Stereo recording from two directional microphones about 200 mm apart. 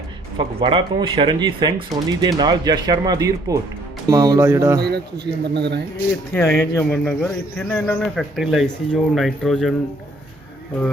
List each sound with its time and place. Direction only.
0.3 s speech: 25° right (ahead or behind)
4.8 s a man's voice: 55° right (ahead or behind)
6.3 s a man's voice: 10° left (ahead or behind)